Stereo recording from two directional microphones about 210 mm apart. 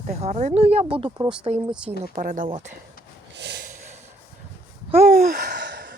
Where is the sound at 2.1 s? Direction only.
40° right (ahead or behind).